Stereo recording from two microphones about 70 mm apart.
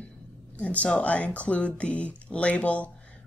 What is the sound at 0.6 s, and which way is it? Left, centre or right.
Speech, centre.